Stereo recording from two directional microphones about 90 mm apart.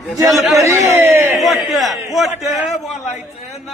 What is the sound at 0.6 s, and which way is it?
Speech, 35° right (ahead or behind).